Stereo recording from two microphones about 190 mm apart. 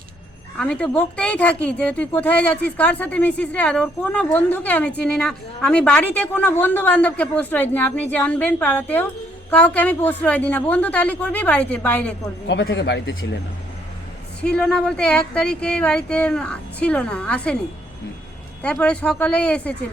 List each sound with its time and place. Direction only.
0.6 s a woman's voice: 5° left (ahead or behind)
12.5 s speech: 75° left (ahead or behind)
14.4 s speech: 5° left (ahead or behind)
18.6 s a woman's voice: 5° left (ahead or behind)